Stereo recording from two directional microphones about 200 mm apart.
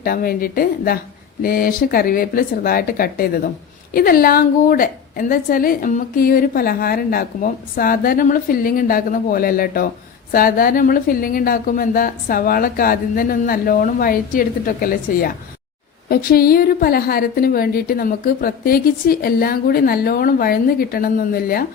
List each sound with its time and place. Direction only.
0.0 s a woman's voice: 50° left (ahead or behind)